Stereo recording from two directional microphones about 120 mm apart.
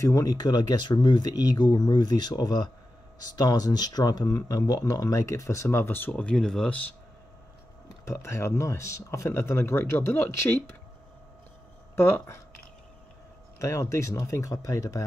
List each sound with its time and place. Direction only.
0.0 s speech: 30° left (ahead or behind); by 6.8 s 5° left (ahead or behind)
8.0 s speech: 25° left (ahead or behind)
11.9 s speech: 20° left (ahead or behind)
13.6 s speech: 25° left (ahead or behind)